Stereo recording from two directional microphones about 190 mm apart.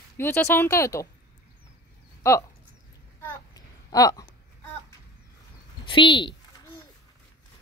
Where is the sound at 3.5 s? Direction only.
20° left (ahead or behind).